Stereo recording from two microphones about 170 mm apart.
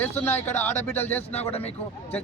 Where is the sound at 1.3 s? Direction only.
35° left (ahead or behind).